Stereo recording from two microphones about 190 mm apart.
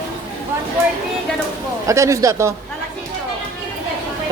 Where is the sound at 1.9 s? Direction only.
15° right (ahead or behind).